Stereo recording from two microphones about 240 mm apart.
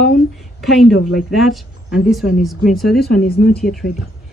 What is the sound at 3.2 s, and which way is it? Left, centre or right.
Speech, left.